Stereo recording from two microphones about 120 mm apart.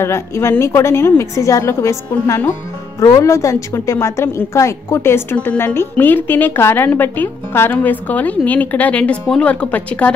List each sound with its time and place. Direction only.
0.0 s a woman's voice: 20° left (ahead or behind)